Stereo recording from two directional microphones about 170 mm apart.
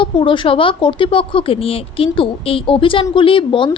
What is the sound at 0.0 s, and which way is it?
A child's voice, 30° left (ahead or behind).